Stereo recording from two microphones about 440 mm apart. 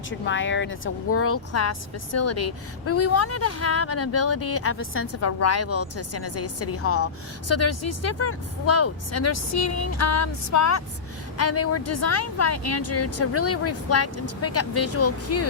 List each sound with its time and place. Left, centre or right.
0.1 s a woman's voice: left